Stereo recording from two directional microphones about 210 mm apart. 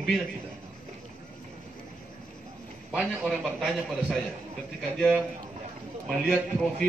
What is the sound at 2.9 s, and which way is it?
A man's voice, 5° right (ahead or behind).